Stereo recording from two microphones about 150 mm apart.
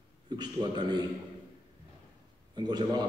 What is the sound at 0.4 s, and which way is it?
Speech, 30° right (ahead or behind).